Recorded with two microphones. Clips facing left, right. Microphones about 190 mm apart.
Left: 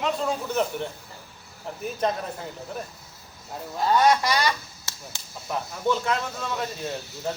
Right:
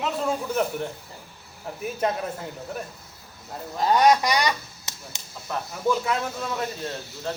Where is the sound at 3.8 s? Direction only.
20° right (ahead or behind).